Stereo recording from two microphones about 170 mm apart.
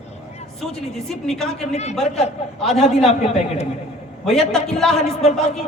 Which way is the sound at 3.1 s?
40° left (ahead or behind).